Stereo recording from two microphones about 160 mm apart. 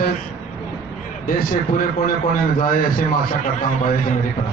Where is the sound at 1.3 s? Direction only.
65° left (ahead or behind).